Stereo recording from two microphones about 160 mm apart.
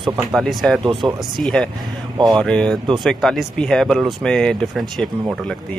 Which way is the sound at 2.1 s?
25° right (ahead or behind).